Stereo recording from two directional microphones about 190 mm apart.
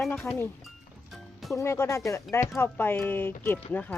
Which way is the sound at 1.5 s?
15° left (ahead or behind).